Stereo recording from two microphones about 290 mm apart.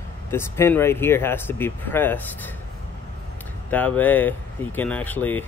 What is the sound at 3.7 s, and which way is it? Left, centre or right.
Speech, centre.